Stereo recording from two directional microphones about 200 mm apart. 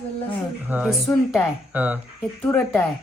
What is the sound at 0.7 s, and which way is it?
Speech, 5° right (ahead or behind).